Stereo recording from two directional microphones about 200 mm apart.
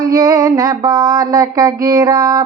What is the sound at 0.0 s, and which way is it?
Music, 20° right (ahead or behind).